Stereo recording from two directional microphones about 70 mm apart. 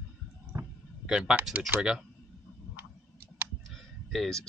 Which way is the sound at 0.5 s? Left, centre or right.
Right.